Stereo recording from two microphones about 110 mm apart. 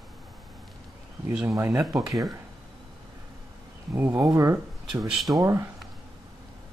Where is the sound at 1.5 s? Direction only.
30° right (ahead or behind).